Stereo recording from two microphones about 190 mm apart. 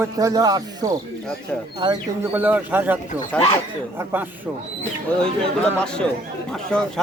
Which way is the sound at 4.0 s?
10° right (ahead or behind).